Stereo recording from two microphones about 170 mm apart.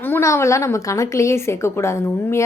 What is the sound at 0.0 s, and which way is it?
A woman's voice, 15° left (ahead or behind).